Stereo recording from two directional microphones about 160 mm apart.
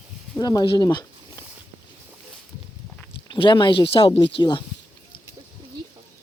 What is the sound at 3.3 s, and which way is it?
Speech, 30° left (ahead or behind).